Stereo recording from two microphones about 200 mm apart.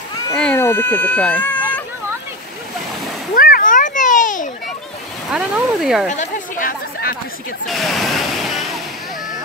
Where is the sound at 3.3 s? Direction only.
45° left (ahead or behind).